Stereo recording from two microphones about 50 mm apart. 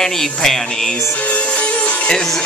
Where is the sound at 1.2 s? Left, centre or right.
Left.